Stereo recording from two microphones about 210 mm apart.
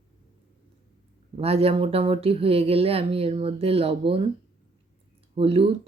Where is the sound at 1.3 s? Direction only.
30° right (ahead or behind).